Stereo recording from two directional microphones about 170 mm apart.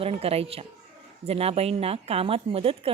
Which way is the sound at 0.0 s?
35° right (ahead or behind).